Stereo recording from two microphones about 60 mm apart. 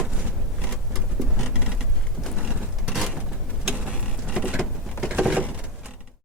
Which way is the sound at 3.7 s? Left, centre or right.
Centre.